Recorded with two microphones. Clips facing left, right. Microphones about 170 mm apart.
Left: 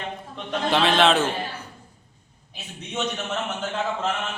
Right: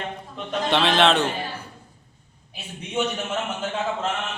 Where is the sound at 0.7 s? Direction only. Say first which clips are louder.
Even; centre (ahead or behind).